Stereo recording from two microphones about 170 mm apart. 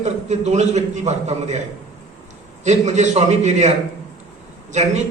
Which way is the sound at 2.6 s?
40° right (ahead or behind).